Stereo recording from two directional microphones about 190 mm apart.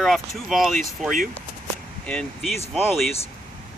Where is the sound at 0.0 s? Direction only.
Centre (ahead or behind).